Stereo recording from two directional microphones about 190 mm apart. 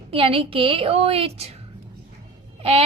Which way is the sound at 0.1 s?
30° right (ahead or behind).